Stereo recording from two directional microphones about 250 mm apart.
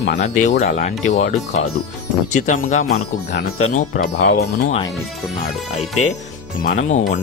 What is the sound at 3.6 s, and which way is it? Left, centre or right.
Speech, left.